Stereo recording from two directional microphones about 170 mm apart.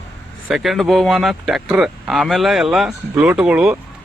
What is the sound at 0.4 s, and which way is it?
Speech, centre (ahead or behind).